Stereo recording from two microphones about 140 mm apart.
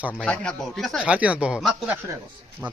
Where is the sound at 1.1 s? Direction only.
10° right (ahead or behind).